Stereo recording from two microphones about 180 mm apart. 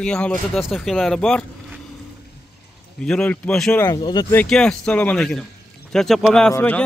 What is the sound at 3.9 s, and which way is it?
Speech, 20° left (ahead or behind).